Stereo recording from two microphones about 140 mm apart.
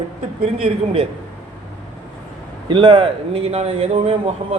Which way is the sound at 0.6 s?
40° right (ahead or behind).